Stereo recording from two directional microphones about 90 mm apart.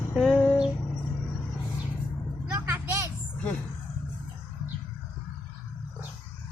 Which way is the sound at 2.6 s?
25° right (ahead or behind).